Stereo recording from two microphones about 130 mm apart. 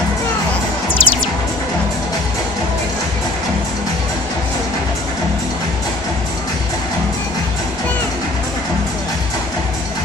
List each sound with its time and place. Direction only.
0.8 s music: 45° left (ahead or behind)